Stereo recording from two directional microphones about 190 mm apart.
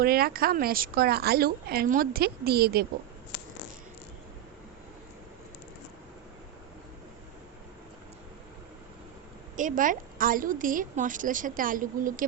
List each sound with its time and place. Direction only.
0.0 s a woman's voice: 50° right (ahead or behind)
9.6 s a woman's voice: 45° right (ahead or behind)